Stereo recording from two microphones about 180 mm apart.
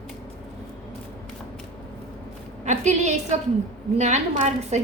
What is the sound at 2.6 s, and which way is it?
A woman's voice, 40° right (ahead or behind).